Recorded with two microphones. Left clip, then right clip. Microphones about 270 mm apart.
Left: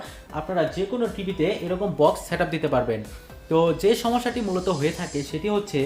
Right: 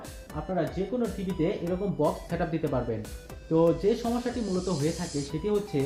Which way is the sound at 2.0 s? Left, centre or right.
Left.